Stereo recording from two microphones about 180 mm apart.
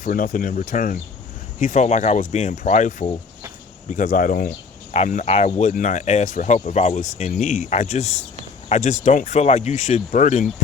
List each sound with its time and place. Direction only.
0.0 s speech: 50° left (ahead or behind)
4.9 s speech: 40° left (ahead or behind)